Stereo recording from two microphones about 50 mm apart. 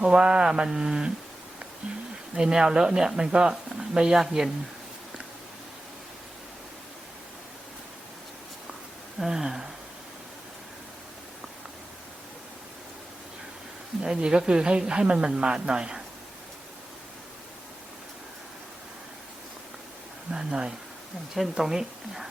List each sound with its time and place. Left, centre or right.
0.0 s speech: centre
2.3 s speech: centre
9.1 s speech: centre
14.0 s speech: centre
20.3 s a woman's voice: centre